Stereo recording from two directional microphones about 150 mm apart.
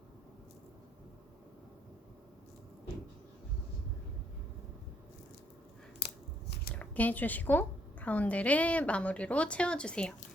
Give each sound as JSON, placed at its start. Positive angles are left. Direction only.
{"t": 6.7, "sound": "a woman's voice", "side_deg": 10}